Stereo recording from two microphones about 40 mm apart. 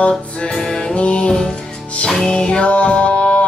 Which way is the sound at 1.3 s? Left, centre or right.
Centre.